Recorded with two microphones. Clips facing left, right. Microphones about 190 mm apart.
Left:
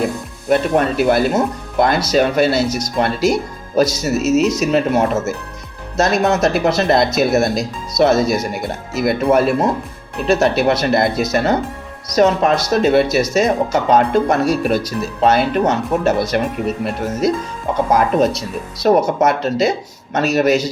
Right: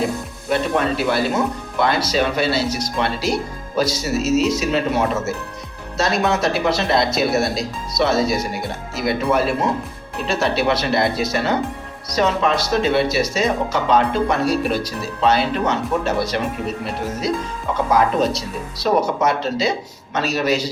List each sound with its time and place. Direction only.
0.5 s speech: 50° left (ahead or behind)